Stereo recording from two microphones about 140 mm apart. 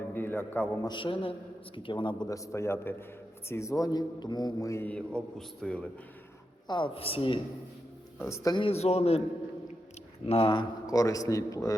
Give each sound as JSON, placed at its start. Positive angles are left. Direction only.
{"t": 0.1, "sound": "a man's voice", "side_deg": 15}
{"t": 0.9, "sound": "a man's voice", "side_deg": 35}
{"t": 5.4, "sound": "a man's voice", "side_deg": 5}
{"t": 6.7, "sound": "a man's voice", "side_deg": 35}
{"t": 8.2, "sound": "a man's voice", "side_deg": 20}
{"t": 8.5, "sound": "a man's voice", "side_deg": 45}
{"t": 10.2, "sound": "a man's voice", "side_deg": 40}